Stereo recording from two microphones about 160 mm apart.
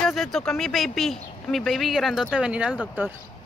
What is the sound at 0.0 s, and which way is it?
Speech, centre (ahead or behind).